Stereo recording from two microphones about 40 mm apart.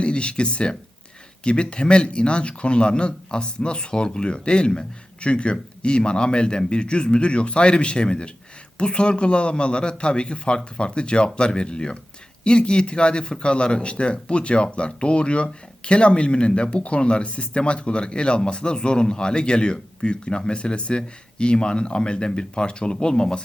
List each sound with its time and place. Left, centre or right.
0.0 s speech: left